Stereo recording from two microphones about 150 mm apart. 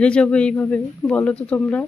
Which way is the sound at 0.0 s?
5° left (ahead or behind).